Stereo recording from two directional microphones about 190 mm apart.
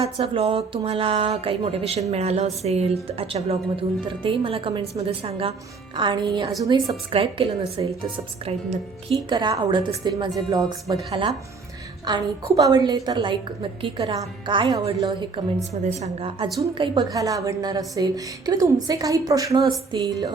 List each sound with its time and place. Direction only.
0.0 s a woman's voice: 30° right (ahead or behind)
12.0 s a woman's voice: 20° right (ahead or behind)